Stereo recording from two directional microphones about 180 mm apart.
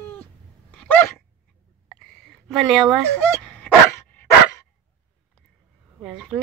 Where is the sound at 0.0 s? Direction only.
10° left (ahead or behind).